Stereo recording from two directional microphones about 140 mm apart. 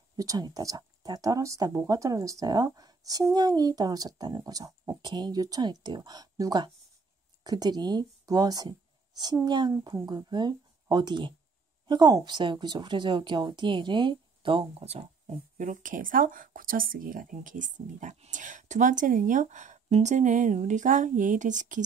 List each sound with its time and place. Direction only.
0.2 s a woman's voice: 25° right (ahead or behind); by 15.3 s 45° right (ahead or behind)
15.5 s speech: 65° right (ahead or behind)